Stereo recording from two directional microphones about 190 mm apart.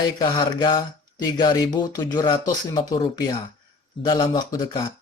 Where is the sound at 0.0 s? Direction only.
25° left (ahead or behind).